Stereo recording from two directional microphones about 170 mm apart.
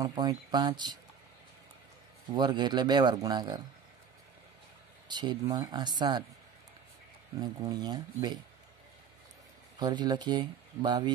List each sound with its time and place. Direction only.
0.0 s speech: 25° right (ahead or behind)
2.3 s speech: 25° right (ahead or behind)
5.0 s speech: 25° right (ahead or behind)
7.3 s speech: 25° right (ahead or behind)
9.8 s speech: 25° right (ahead or behind)